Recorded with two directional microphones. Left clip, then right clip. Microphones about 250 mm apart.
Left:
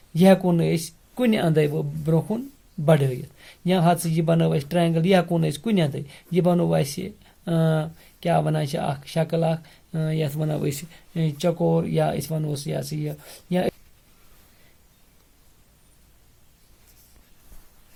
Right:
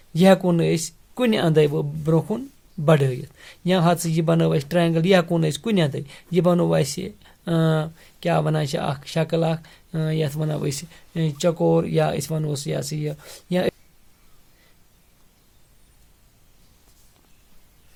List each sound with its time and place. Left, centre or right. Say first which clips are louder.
0.1 s speech: right 1 dB; right